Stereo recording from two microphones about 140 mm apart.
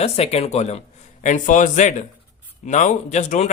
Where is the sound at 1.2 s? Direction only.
65° left (ahead or behind).